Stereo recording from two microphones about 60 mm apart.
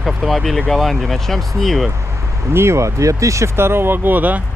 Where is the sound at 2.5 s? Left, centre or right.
Right.